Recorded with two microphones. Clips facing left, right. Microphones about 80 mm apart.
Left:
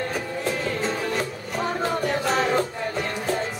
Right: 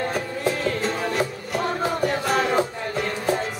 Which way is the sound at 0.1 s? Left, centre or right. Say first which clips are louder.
Right 2 dB; centre.